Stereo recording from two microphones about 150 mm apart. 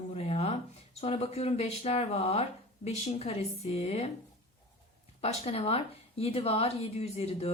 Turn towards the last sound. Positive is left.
turn(degrees=45)  # may be behind; listen again after turning